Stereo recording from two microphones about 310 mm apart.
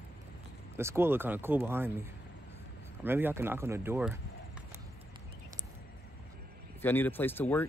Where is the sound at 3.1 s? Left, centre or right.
Centre.